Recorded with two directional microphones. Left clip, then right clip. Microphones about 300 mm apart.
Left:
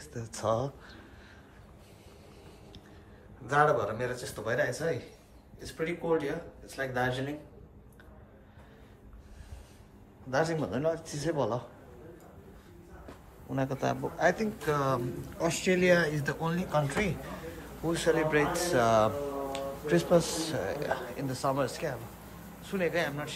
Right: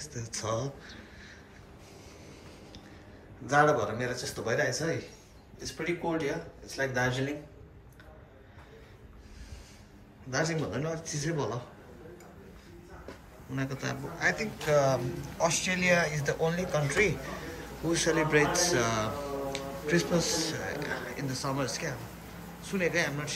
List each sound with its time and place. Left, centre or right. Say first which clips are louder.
0.0 s a man's voice: left 3 dB; centre
3.4 s a man's voice: right 1 dB; centre
10.3 s a man's voice: left 2 dB; centre
13.5 s a man's voice: left 4 dB; centre